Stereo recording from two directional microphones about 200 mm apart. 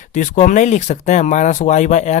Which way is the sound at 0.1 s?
40° left (ahead or behind).